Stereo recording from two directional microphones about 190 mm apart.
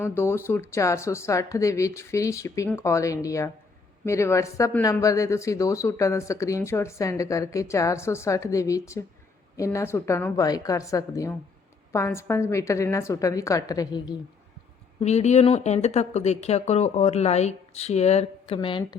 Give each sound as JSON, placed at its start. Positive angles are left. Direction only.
{"t": 0.0, "sound": "speech", "side_deg": 15}
{"t": 15.0, "sound": "speech", "side_deg": 35}